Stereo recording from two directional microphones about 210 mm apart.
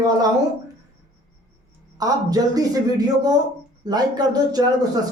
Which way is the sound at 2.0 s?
15° right (ahead or behind).